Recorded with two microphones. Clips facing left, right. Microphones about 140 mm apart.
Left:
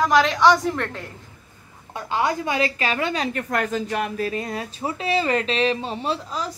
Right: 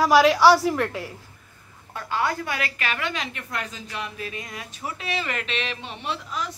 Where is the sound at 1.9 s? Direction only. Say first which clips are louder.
Left 3 dB; 20° left (ahead or behind).